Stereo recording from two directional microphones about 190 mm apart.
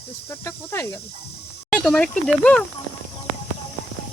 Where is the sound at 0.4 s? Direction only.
15° left (ahead or behind).